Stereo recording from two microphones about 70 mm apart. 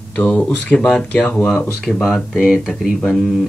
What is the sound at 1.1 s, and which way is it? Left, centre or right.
Speech, left.